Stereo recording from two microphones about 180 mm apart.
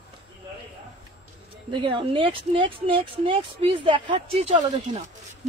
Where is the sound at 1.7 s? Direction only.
30° right (ahead or behind).